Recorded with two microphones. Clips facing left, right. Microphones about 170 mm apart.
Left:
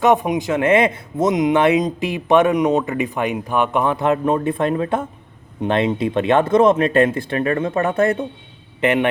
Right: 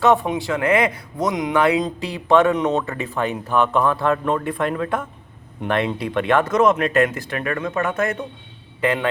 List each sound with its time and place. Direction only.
0.0 s speech: 15° left (ahead or behind)